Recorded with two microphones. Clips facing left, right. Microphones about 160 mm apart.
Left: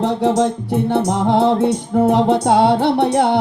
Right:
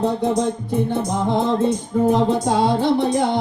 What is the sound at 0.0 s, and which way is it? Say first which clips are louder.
Music: left 3 dB; 80° left.